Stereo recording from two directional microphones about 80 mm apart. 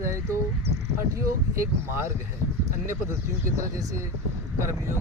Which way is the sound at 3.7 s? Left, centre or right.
Right.